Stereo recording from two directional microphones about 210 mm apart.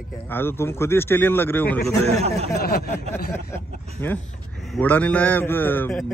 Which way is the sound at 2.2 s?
30° right (ahead or behind).